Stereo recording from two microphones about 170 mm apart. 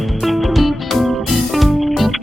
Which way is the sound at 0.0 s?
Centre (ahead or behind).